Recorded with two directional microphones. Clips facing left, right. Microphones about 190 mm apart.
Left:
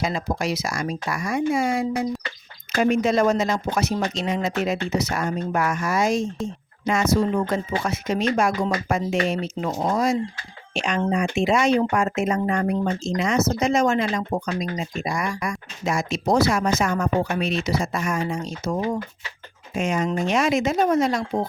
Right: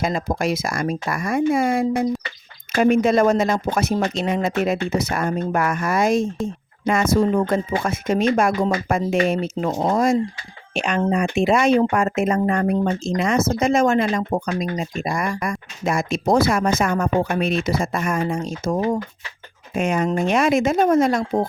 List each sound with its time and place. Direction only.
0.0 s speech: 50° right (ahead or behind)
19.7 s speech: 60° right (ahead or behind)